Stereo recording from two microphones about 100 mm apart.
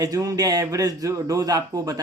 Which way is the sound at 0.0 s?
35° right (ahead or behind).